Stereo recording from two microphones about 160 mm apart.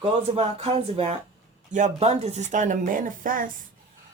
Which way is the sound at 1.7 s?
50° right (ahead or behind).